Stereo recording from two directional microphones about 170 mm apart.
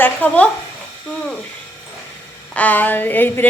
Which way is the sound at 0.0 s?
10° left (ahead or behind).